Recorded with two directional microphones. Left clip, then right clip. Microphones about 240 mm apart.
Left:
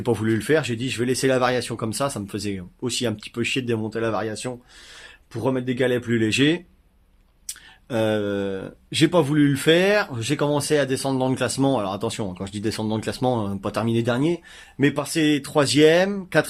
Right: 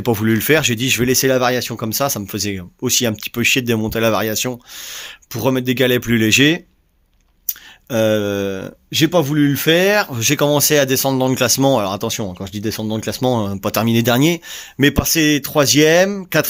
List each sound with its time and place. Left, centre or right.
0.0 s speech: right